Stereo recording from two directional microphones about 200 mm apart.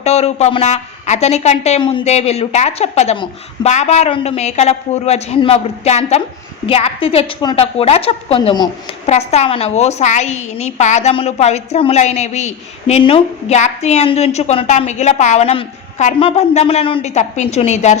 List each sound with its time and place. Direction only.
0.0 s a woman's voice: 30° left (ahead or behind)
9.0 s a woman's voice: 35° left (ahead or behind)